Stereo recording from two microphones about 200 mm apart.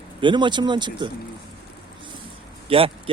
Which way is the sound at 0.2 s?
25° right (ahead or behind).